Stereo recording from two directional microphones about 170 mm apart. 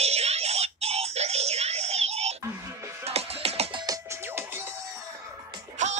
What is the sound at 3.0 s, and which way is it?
Music, 35° right (ahead or behind).